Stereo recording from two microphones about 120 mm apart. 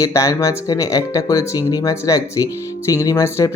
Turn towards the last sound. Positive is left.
turn(degrees=25)  # may be behind; listen again after turning